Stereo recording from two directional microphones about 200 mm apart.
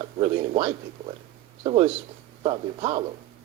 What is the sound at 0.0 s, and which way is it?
A man's voice, 30° right (ahead or behind).